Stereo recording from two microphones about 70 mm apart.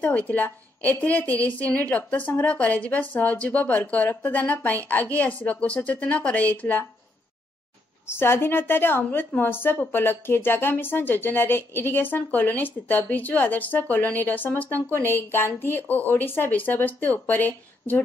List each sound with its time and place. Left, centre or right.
0.0 s a woman's voice: left
8.1 s a woman's voice: left